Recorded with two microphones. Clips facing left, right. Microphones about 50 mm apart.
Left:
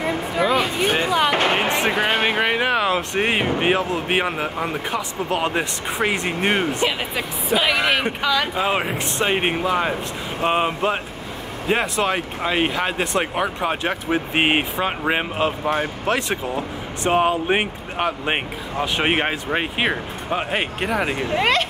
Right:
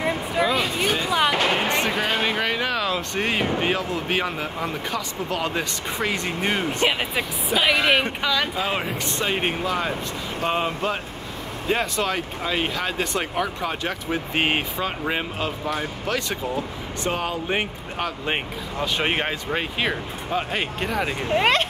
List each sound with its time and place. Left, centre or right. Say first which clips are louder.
0.4 s a sound: left 3 dB; left
1.3 s music: left 3 dB; left
1.8 s speech: left 3 dB; left
7.6 s speech: right 2 dB; centre
8.5 s speech: left 4 dB; left